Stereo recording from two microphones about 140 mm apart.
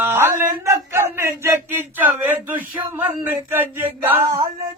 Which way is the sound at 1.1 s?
15° right (ahead or behind).